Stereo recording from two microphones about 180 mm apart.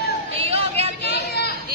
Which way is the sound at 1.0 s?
65° left (ahead or behind).